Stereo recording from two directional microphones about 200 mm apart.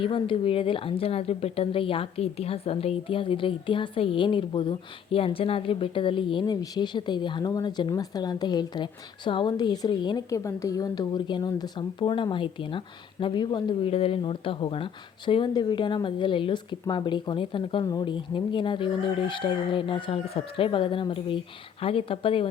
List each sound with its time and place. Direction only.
0.0 s speech: 25° left (ahead or behind)